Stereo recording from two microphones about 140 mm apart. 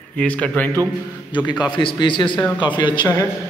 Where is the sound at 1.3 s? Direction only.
30° left (ahead or behind).